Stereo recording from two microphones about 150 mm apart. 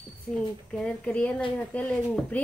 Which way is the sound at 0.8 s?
10° left (ahead or behind).